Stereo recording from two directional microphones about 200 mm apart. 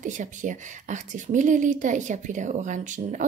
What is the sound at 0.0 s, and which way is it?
A woman's voice, 40° right (ahead or behind).